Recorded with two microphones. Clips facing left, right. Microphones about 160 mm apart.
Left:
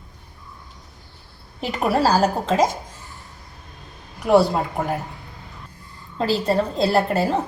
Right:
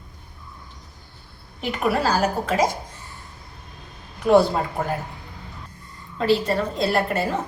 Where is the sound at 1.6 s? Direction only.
35° left (ahead or behind).